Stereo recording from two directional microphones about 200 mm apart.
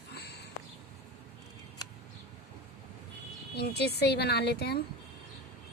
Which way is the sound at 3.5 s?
55° left (ahead or behind).